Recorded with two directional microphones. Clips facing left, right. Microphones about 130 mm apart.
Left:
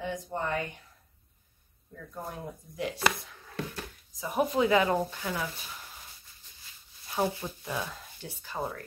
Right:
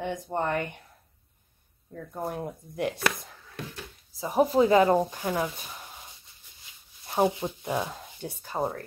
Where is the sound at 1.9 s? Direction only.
55° right (ahead or behind).